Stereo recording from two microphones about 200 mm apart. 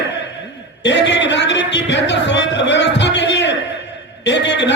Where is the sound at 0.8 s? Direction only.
60° left (ahead or behind).